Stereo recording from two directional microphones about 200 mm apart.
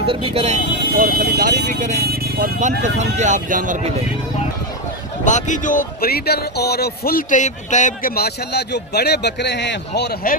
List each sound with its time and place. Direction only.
0.0 s speech: 25° right (ahead or behind); by 3.8 s 40° right (ahead or behind)
5.2 s speech: 40° left (ahead or behind); by 10.3 s 55° left (ahead or behind)